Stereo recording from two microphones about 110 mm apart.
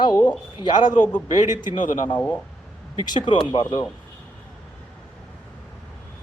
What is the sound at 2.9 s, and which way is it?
Speech, 45° left (ahead or behind).